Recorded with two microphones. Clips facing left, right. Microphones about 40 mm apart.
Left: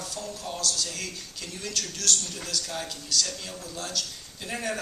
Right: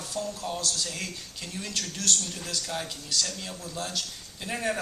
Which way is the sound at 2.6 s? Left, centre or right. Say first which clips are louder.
Right 1 dB; centre.